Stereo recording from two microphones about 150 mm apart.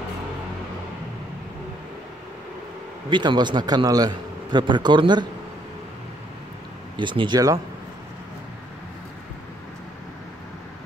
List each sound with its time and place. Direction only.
3.1 s a man's voice: 30° right (ahead or behind)
7.0 s a man's voice: 30° right (ahead or behind)